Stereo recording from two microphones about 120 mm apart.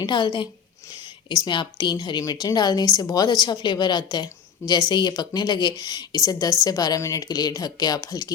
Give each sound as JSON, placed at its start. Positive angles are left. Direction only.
{"t": 0.0, "sound": "a woman's voice", "side_deg": 35}